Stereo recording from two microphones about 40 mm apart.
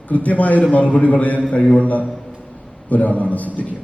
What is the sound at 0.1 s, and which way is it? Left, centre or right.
A man's voice, left.